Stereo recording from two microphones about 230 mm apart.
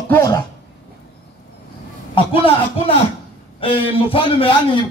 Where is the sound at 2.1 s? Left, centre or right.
Left.